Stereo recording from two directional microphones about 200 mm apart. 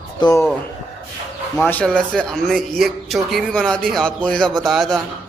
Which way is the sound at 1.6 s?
10° left (ahead or behind).